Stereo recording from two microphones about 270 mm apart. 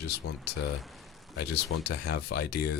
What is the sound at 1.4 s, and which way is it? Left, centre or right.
Speech, left.